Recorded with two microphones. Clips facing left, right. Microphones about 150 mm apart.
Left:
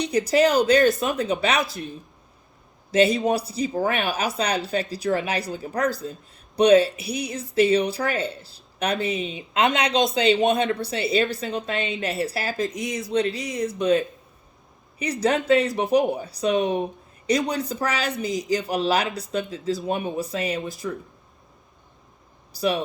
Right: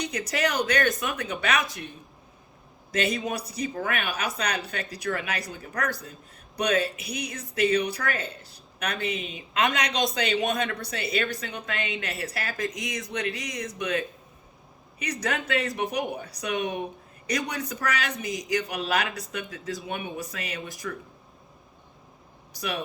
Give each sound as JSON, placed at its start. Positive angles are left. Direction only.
{"t": 0.0, "sound": "a man's voice", "side_deg": 30}
{"t": 2.9, "sound": "a man's voice", "side_deg": 30}